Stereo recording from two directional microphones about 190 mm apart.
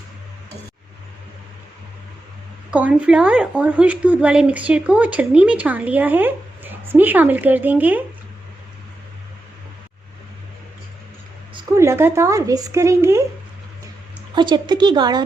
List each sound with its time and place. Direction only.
2.6 s a woman's voice: 5° right (ahead or behind)
11.8 s a woman's voice: 15° right (ahead or behind)
14.3 s a woman's voice: 25° right (ahead or behind)